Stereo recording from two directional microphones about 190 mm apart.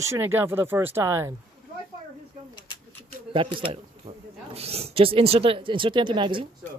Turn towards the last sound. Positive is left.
turn(degrees=-25)  # may be behind; listen again after turning